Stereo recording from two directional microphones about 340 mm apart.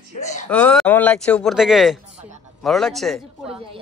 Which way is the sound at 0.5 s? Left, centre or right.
Centre.